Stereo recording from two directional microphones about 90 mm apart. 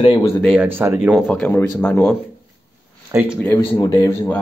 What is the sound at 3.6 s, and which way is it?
Speech, 50° left (ahead or behind).